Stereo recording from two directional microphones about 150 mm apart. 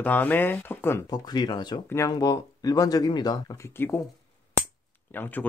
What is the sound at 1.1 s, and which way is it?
Speech, 25° left (ahead or behind).